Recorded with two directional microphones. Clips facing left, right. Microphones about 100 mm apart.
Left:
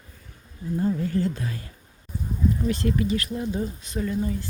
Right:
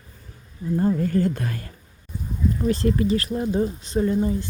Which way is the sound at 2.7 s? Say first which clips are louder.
Right 7 dB; 35° right (ahead or behind).